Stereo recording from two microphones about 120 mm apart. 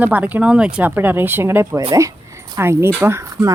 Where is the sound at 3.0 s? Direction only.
20° right (ahead or behind).